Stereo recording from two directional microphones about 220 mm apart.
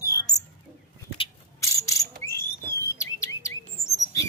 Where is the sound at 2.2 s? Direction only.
10° left (ahead or behind).